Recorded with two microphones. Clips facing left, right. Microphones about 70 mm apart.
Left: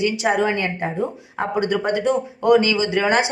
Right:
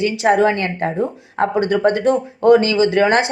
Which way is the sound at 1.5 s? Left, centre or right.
Right.